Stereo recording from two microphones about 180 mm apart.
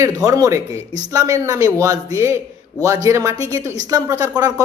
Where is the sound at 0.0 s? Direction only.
20° right (ahead or behind).